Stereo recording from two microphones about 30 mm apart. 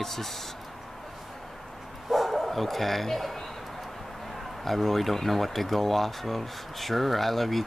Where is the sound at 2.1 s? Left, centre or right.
Centre.